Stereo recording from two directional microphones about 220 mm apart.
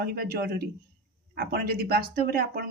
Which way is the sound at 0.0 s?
45° right (ahead or behind).